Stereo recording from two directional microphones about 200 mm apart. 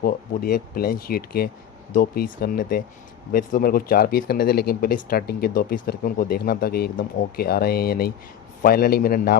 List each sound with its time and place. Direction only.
0.0 s speech: 50° left (ahead or behind)